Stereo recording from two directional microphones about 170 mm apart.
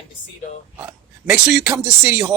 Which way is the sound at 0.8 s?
5° right (ahead or behind).